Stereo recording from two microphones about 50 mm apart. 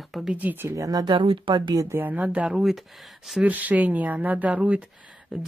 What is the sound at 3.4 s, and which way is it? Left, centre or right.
Speech, right.